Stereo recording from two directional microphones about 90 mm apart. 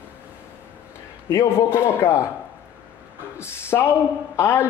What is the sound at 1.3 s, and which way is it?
Speech, 30° left (ahead or behind).